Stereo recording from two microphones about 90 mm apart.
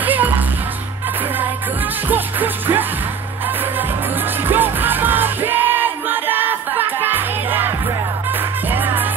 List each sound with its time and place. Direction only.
0.0 s music: 20° right (ahead or behind)
2.0 s music: 20° right (ahead or behind)
4.5 s music: 20° right (ahead or behind)